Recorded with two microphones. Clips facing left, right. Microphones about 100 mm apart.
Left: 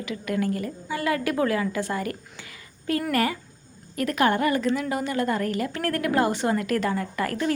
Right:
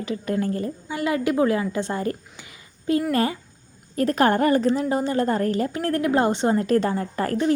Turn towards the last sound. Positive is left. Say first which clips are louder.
# right 4 dB
turn(degrees=-30)  # may be behind; listen again after turning